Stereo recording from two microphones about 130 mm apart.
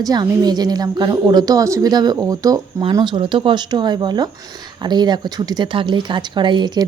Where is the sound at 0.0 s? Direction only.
30° right (ahead or behind).